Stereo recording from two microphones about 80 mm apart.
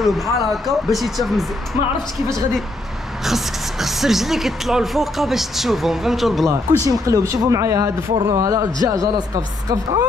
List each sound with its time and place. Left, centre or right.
0.0 s speech: centre
3.3 s speech: centre
6.9 s speech: right